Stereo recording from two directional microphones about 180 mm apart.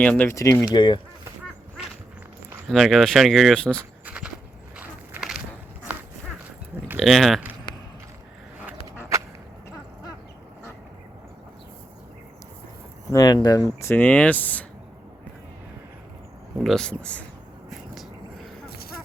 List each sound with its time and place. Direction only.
0.0 s speech: 10° left (ahead or behind); by 0.9 s 25° left (ahead or behind)
2.6 s speech: centre (ahead or behind)
3.8 s a sound: 10° right (ahead or behind)
4.8 s walk: 5° right (ahead or behind)
6.8 s speech: 5° right (ahead or behind)
13.1 s speech: 20° left (ahead or behind)
13.7 s speech: 10° left (ahead or behind)
16.6 s speech: centre (ahead or behind)
18.8 s music: 55° left (ahead or behind)